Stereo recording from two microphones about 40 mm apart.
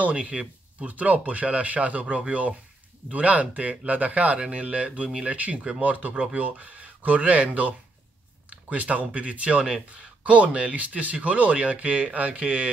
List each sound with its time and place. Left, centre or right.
0.0 s speech: right